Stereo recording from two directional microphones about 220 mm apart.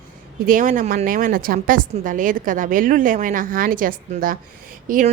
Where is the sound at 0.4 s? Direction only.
35° right (ahead or behind).